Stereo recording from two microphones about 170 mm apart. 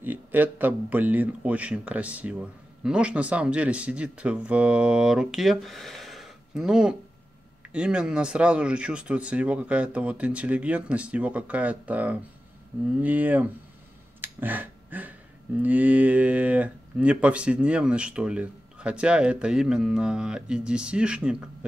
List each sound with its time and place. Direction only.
0.0 s speech: 10° right (ahead or behind)